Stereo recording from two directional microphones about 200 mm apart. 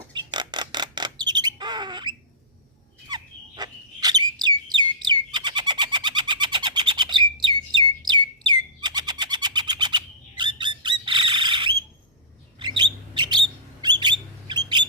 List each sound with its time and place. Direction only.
0.1 s a sound: 20° right (ahead or behind)
1.2 s bird: 20° right (ahead or behind)
3.1 s chirp: 20° right (ahead or behind)
12.5 s bird: 20° right (ahead or behind)